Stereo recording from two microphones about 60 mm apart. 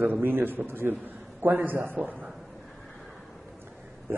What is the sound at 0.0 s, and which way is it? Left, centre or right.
A man's voice, right.